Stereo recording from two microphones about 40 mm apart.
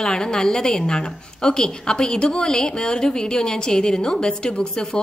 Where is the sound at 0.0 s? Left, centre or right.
Centre.